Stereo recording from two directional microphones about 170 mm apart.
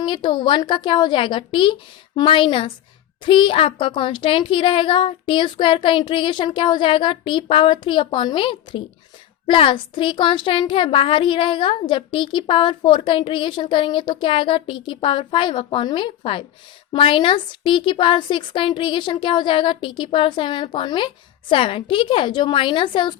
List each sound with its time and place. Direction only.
0.0 s a child's voice: 30° left (ahead or behind)